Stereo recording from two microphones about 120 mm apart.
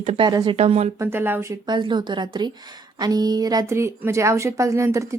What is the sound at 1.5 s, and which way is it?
A woman's voice, 40° right (ahead or behind).